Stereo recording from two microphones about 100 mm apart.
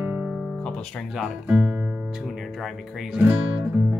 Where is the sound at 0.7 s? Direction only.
10° left (ahead or behind).